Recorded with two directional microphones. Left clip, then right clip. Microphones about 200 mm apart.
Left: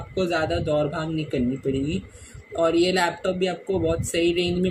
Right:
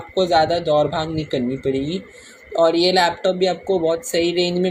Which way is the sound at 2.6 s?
20° right (ahead or behind).